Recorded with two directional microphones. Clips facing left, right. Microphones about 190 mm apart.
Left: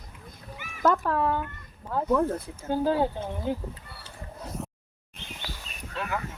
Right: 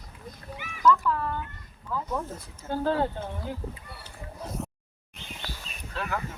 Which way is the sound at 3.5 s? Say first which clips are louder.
Left 7 dB; 25° left (ahead or behind).